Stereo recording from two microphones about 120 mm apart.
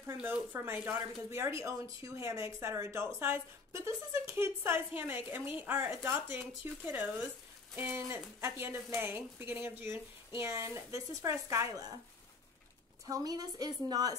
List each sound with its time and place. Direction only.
0.0 s speech: 20° right (ahead or behind)
13.0 s a woman's voice: 30° right (ahead or behind)